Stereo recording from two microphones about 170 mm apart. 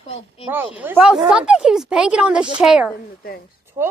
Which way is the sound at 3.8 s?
25° right (ahead or behind).